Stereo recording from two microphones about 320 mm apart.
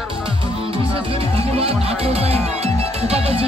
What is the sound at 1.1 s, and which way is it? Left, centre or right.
Music, centre.